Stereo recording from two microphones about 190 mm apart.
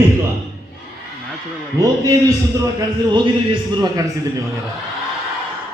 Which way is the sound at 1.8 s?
15° right (ahead or behind).